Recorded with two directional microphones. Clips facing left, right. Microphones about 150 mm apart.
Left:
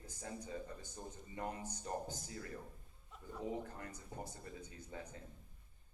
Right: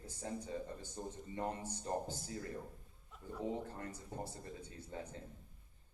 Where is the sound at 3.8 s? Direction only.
30° right (ahead or behind).